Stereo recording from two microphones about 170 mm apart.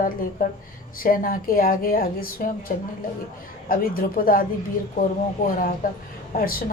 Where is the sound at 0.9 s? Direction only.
55° left (ahead or behind).